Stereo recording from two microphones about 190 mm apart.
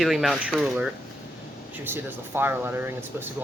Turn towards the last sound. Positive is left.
turn(degrees=-10)  # may be behind; listen again after turning